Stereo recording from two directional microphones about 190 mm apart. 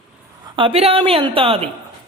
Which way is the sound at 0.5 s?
30° right (ahead or behind).